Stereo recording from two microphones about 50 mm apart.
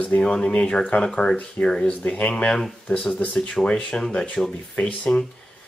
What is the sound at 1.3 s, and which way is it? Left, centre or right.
Speech, left.